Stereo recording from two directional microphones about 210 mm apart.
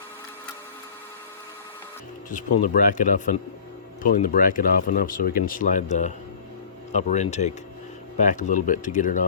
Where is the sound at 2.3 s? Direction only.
40° left (ahead or behind).